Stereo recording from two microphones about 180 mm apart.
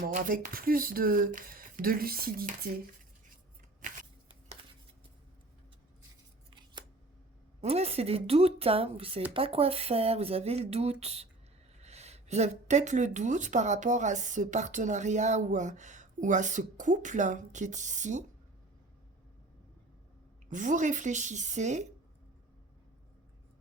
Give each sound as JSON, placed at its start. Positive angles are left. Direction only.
{"t": 0.0, "sound": "speech", "side_deg": -50}
{"t": 3.8, "sound": "a sound", "side_deg": -45}
{"t": 6.5, "sound": "scissors", "side_deg": -25}
{"t": 7.6, "sound": "speech", "side_deg": -35}
{"t": 20.5, "sound": "speech", "side_deg": -45}